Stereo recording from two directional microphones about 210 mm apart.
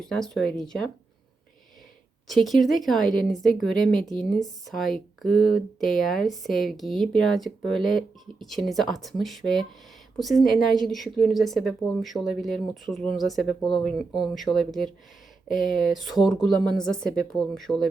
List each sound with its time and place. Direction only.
0.0 s speech: centre (ahead or behind)
2.2 s speech: centre (ahead or behind)